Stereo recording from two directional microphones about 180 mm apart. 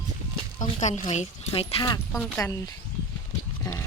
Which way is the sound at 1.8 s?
15° left (ahead or behind).